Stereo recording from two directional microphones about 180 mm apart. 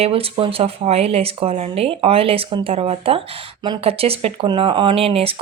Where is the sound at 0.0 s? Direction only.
30° right (ahead or behind).